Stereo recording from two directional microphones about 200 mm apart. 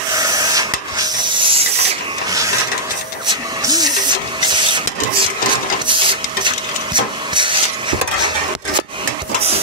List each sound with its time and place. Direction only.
0.2 s rub: 20° right (ahead or behind)
3.3 s printer: 20° right (ahead or behind)